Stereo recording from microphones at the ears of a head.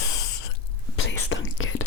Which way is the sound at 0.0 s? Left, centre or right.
Left.